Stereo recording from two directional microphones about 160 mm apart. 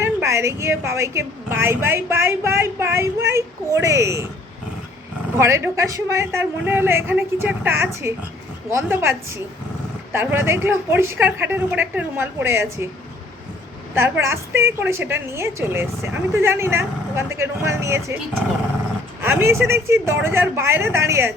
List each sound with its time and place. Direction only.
0.0 s a woman's voice: 15° right (ahead or behind)
5.4 s a woman's voice: 20° right (ahead or behind)
13.9 s a woman's voice: 15° right (ahead or behind)
19.2 s a woman's voice: 15° right (ahead or behind)